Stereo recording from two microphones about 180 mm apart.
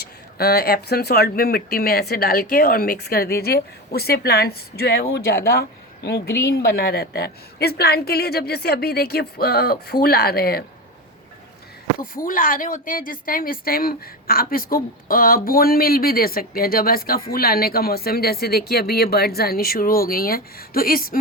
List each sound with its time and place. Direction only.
0.3 s speech: 60° left (ahead or behind)
11.9 s speech: 50° left (ahead or behind)